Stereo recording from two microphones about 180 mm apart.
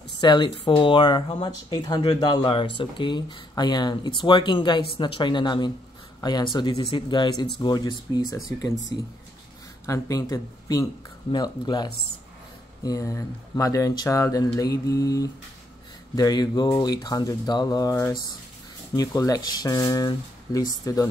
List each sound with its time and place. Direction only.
0.2 s speech: 25° left (ahead or behind)
9.8 s speech: 15° left (ahead or behind)